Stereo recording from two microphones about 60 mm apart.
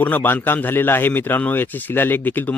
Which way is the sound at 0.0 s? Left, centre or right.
Left.